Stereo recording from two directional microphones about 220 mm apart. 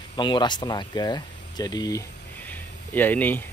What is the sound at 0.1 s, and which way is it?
Speech, 20° left (ahead or behind).